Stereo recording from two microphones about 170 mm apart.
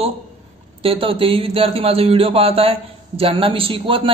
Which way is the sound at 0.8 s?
35° right (ahead or behind).